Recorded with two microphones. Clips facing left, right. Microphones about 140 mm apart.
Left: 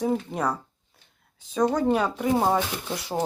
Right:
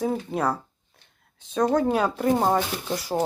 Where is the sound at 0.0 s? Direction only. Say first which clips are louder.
Even; centre (ahead or behind).